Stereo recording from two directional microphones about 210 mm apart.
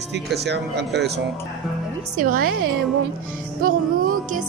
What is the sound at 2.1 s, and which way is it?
Speech, 45° right (ahead or behind).